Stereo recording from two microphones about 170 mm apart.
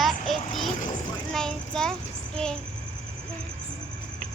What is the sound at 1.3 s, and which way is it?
Child singing, 5° left (ahead or behind).